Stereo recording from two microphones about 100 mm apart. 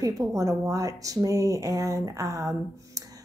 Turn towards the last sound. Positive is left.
turn(degrees=-30)  # may be behind; listen again after turning